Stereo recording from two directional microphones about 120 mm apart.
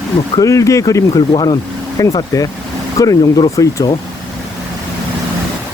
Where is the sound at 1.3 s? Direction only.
40° left (ahead or behind).